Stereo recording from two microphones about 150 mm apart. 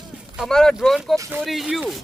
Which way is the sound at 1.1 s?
20° right (ahead or behind).